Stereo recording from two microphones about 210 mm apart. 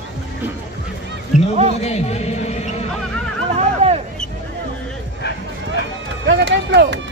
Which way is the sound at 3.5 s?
30° right (ahead or behind).